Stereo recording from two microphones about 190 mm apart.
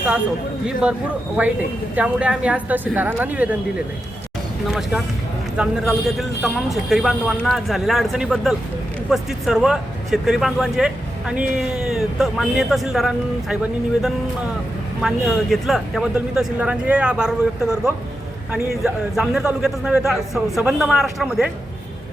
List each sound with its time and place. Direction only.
0.8 s a woman's voice: 5° right (ahead or behind)
4.7 s speech: centre (ahead or behind)
15.0 s speech: centre (ahead or behind)